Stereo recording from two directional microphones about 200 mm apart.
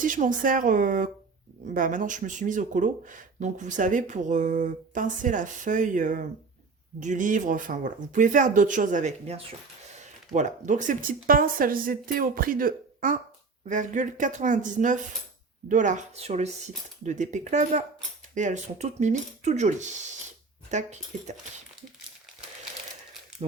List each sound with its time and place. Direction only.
0.0 s speech: 40° right (ahead or behind)